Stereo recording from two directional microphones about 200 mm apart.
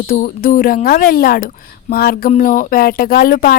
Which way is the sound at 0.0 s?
40° left (ahead or behind).